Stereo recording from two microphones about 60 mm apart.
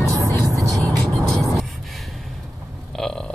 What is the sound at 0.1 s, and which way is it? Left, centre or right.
Music, right.